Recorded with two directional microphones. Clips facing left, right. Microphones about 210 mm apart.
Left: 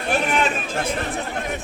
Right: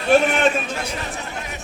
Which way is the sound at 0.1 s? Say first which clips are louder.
Right 6 dB; 50° right (ahead or behind).